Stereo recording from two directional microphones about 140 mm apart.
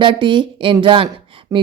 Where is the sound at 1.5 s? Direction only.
20° right (ahead or behind).